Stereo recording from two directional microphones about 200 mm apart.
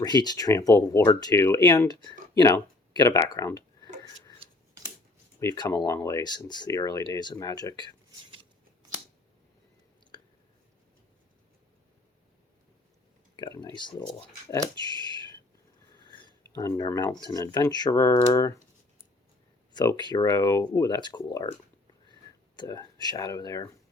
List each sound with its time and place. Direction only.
0.0 s speech: 20° left (ahead or behind)
5.4 s speech: 20° left (ahead or behind)
13.3 s speech: 20° left (ahead or behind)
15.9 s speech: 20° left (ahead or behind)
19.7 s speech: 20° left (ahead or behind)
22.5 s speech: 20° left (ahead or behind)